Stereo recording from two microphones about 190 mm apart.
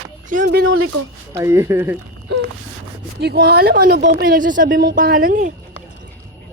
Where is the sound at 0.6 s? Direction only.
90° right.